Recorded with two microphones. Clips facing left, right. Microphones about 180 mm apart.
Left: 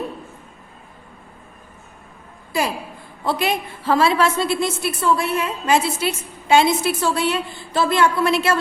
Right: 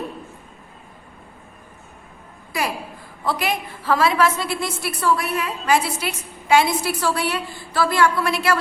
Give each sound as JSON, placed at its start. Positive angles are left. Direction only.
{"t": 2.5, "sound": "a woman's voice", "side_deg": 25}